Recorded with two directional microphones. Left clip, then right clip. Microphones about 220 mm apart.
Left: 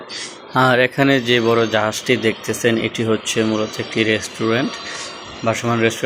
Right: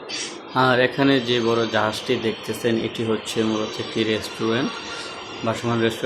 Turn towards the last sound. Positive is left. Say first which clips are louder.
# left 4 dB
turn(degrees=10)  # may be behind; listen again after turning